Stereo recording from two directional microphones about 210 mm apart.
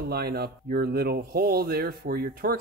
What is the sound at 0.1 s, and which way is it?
Speech, 50° right (ahead or behind).